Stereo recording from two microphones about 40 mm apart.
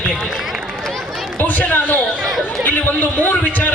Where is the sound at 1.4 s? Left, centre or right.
Left.